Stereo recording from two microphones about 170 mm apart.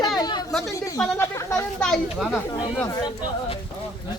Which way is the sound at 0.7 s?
15° left (ahead or behind).